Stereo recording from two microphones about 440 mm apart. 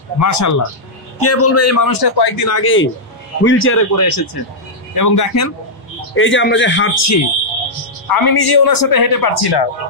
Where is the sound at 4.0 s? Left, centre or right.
Left.